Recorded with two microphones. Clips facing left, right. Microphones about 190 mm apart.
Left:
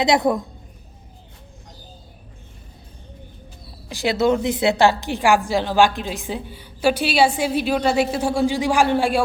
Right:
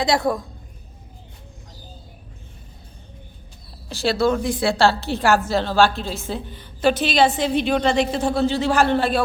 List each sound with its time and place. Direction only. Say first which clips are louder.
0.0 s a woman's voice: left 2 dB; 20° left (ahead or behind)
3.8 s a woman's voice: left 1 dB; 15° left (ahead or behind)